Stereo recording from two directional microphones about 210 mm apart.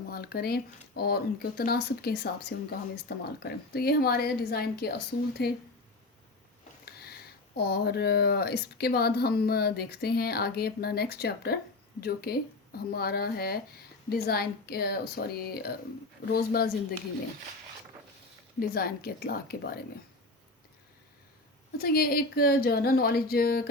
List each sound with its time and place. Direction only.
0.1 s speech: 45° left (ahead or behind)
6.8 s speech: 50° left (ahead or behind)
18.6 s speech: 45° left (ahead or behind)
21.8 s speech: 45° left (ahead or behind)